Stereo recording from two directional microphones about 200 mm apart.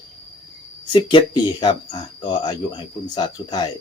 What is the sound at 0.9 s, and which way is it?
Speech, 25° left (ahead or behind).